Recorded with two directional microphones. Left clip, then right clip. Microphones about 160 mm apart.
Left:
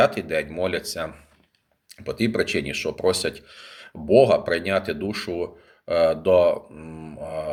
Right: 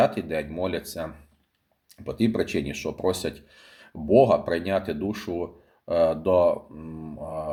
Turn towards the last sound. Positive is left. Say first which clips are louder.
# left 2 dB
turn(degrees=-10)  # may be behind; listen again after turning